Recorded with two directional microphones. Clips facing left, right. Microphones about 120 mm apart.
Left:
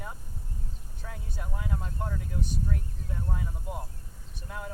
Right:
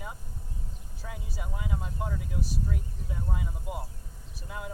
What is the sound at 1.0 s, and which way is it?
Vehicle, 5° right (ahead or behind).